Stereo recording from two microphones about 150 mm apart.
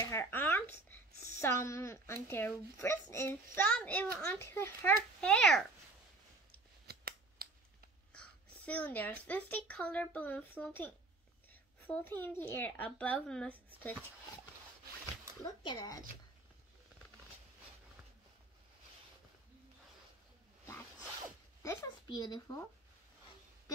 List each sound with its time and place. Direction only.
0.0 s a sound: 15° left (ahead or behind)
1.1 s a sound: 70° right (ahead or behind)
1.4 s speech: 20° left (ahead or behind)
5.2 s a child's voice: 5° left (ahead or behind)
6.9 s scissors: 90° right
8.1 s a sound: 10° left (ahead or behind)
9.3 s speech: 10° left (ahead or behind)
15.4 s speech: 30° left (ahead or behind)
21.6 s a child's voice: 25° left (ahead or behind)